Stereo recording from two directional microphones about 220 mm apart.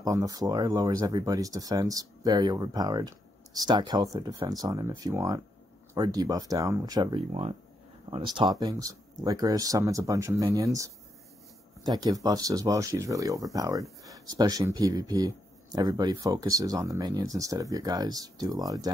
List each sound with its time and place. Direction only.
0.0 s speech: 15° right (ahead or behind)